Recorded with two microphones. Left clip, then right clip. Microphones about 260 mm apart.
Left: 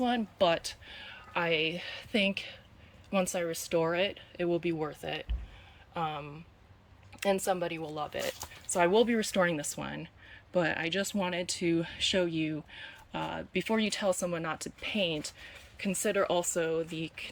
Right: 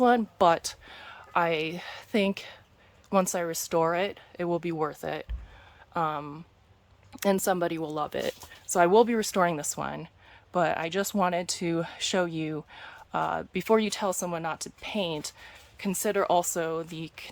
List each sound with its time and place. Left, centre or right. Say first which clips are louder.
0.0 s speech: right 7 dB; centre